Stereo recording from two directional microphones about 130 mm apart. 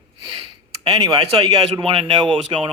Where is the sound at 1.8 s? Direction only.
45° right (ahead or behind).